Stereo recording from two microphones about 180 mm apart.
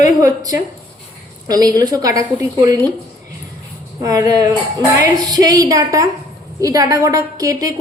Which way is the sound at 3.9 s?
20° right (ahead or behind).